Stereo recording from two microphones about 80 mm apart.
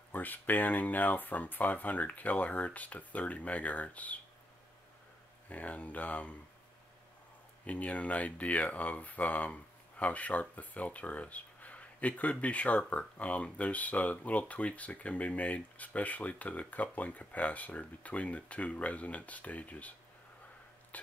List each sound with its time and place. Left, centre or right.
0.1 s speech: left
5.5 s speech: centre
7.6 s speech: centre
20.9 s a sound: centre